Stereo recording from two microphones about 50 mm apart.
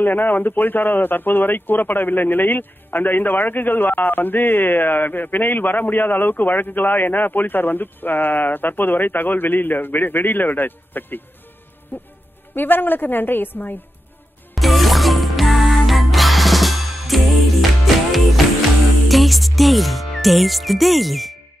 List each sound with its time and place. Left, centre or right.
0.0 s speech: left
11.9 s music: left
12.5 s speech: left
14.5 s music: centre
19.0 s music: centre